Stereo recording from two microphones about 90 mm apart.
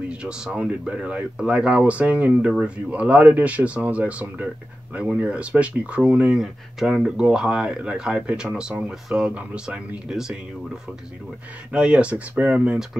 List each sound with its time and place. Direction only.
0.1 s speech: 10° right (ahead or behind)
11.7 s speech: 10° right (ahead or behind)